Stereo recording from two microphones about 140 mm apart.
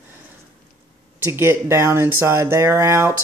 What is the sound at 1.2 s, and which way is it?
Speech, 15° right (ahead or behind).